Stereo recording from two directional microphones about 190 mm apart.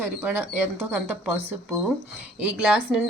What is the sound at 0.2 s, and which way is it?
Speech, 10° right (ahead or behind).